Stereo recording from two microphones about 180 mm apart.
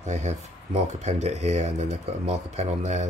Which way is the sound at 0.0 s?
40° right (ahead or behind).